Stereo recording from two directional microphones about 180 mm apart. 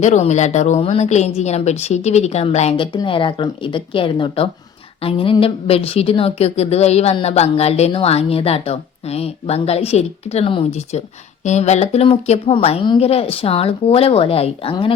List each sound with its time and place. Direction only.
0.0 s a woman's voice: 40° left (ahead or behind)